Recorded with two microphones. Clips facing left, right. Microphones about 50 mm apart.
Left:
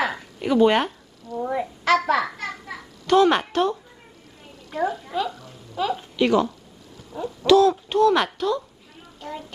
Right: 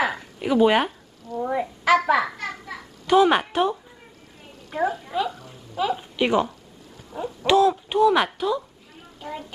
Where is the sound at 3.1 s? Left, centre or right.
Centre.